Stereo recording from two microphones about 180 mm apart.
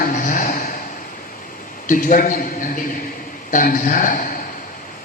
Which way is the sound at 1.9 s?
50° left (ahead or behind).